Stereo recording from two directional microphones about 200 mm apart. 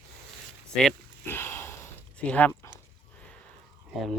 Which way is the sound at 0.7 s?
5° left (ahead or behind).